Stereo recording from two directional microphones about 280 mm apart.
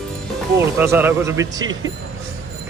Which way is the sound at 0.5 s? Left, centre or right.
Centre.